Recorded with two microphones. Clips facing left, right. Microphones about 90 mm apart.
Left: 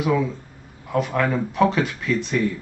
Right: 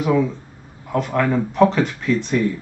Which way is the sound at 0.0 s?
Centre (ahead or behind).